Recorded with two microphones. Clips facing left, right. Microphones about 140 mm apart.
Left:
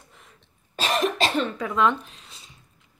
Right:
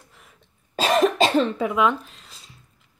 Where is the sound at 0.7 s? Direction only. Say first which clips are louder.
Right 5 dB; 20° right (ahead or behind).